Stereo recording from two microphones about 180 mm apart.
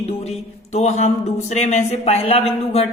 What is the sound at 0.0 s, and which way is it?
Speech, 35° left (ahead or behind).